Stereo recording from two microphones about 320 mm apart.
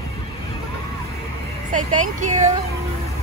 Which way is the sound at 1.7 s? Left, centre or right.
Right.